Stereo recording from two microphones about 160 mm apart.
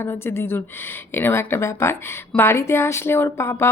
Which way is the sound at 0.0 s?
15° left (ahead or behind).